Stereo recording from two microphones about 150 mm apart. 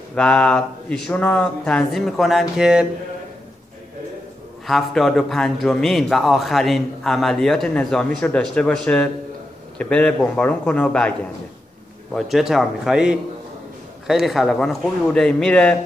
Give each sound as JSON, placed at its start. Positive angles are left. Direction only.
{"t": 0.1, "sound": "a man's voice", "side_deg": 5}
{"t": 4.6, "sound": "a man's voice", "side_deg": 0}